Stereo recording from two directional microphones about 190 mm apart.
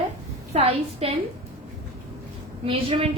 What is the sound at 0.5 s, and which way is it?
Speech, 30° right (ahead or behind).